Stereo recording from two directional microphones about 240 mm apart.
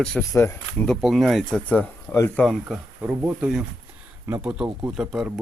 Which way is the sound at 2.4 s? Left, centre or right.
Centre.